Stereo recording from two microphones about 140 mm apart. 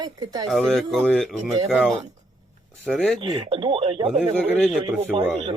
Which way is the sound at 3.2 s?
35° right (ahead or behind).